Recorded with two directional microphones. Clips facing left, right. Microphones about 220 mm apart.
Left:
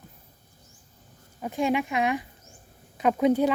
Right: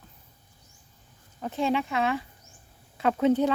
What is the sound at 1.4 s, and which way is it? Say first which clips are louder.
Speech: left 1 dB; 15° left (ahead or behind).